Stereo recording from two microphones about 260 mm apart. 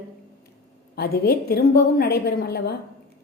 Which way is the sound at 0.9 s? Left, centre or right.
Left.